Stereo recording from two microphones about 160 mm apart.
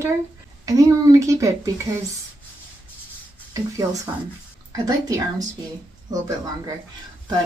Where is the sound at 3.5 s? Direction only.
20° right (ahead or behind).